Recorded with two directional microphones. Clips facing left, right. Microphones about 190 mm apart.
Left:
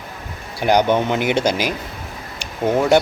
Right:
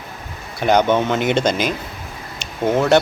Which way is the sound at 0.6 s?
10° left (ahead or behind).